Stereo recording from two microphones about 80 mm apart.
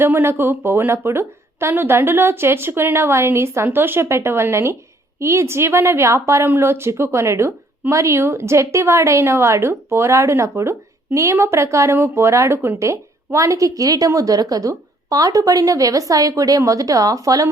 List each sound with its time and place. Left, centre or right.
0.0 s a woman's voice: right